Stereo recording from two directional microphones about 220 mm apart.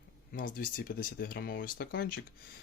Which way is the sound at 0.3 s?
40° left (ahead or behind).